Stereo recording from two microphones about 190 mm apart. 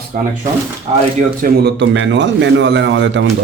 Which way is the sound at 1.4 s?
65° right (ahead or behind).